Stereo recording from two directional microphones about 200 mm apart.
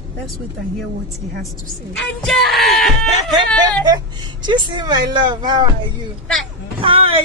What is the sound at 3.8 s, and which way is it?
Speech, 20° right (ahead or behind).